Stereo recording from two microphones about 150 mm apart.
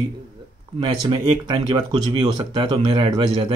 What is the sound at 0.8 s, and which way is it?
Speech, 25° right (ahead or behind).